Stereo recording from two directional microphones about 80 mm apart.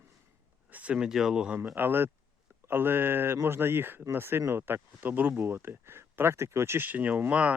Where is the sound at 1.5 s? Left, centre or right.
Right.